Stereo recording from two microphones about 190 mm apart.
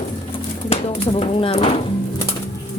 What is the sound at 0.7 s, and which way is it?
Speech, 30° left (ahead or behind).